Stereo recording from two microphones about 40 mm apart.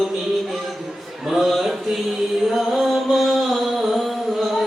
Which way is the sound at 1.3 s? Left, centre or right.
Centre.